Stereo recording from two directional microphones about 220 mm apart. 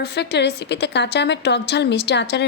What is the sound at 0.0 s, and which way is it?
A woman's voice, 50° left (ahead or behind).